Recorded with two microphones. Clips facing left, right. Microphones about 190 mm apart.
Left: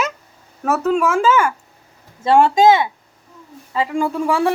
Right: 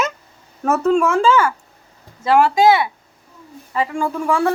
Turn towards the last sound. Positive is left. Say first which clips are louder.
# left 1 dB
turn(degrees=15)  # may be behind; listen again after turning